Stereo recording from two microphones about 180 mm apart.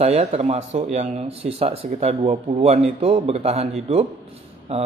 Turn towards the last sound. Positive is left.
turn(degrees=-35)  # may be behind; listen again after turning